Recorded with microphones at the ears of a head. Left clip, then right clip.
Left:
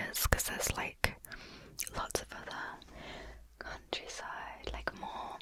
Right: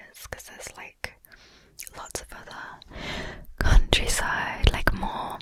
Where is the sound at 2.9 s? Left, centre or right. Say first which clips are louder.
Right 13 dB; right.